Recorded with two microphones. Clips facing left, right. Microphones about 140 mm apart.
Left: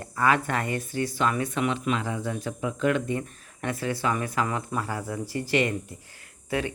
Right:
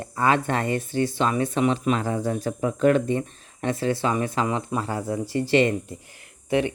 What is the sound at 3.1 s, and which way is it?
Speech, 25° right (ahead or behind).